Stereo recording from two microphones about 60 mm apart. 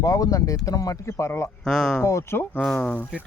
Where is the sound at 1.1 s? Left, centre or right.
Left.